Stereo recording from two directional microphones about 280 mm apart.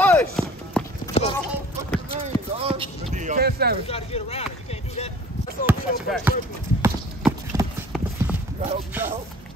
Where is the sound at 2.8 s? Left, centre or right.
Right.